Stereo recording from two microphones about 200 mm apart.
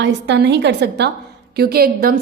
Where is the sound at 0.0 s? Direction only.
60° right (ahead or behind).